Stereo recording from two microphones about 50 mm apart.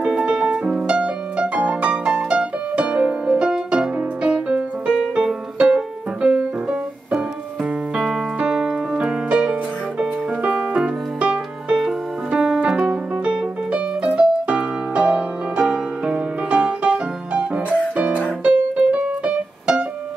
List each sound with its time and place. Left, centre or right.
0.0 s piano: right
6.2 s music: right
7.9 s piano: centre
11.1 s music: centre
11.8 s piano: centre
16.1 s music: centre
18.4 s keyboard: right